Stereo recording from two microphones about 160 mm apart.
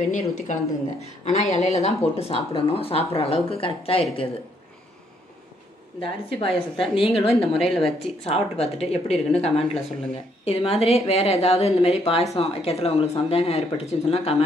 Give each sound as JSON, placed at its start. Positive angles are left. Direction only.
{"t": 0.1, "sound": "speech", "side_deg": 50}
{"t": 5.9, "sound": "speech", "side_deg": 35}
{"t": 7.2, "sound": "a woman's voice", "side_deg": 0}
{"t": 7.8, "sound": "speech", "side_deg": 40}